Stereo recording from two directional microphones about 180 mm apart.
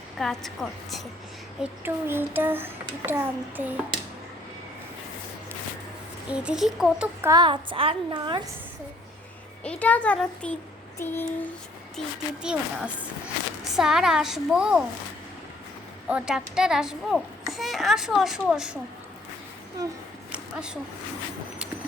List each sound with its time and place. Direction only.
0.2 s speech: centre (ahead or behind)
1.8 s a child's voice: 10° right (ahead or behind)
6.3 s speech: 5° right (ahead or behind)
7.2 s a woman's voice: 20° right (ahead or behind)
9.6 s speech: 10° left (ahead or behind)
11.9 s speech: 5° right (ahead or behind)
16.0 s speech: 5° right (ahead or behind)
19.8 s a woman's voice: 20° right (ahead or behind)
20.3 s a sound: 5° right (ahead or behind)